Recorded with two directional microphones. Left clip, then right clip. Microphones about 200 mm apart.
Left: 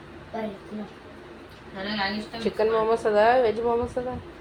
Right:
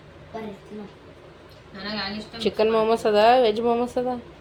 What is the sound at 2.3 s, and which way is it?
A woman's voice, 30° right (ahead or behind).